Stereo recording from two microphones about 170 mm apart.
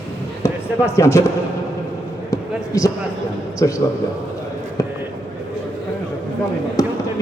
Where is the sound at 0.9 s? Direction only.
15° left (ahead or behind).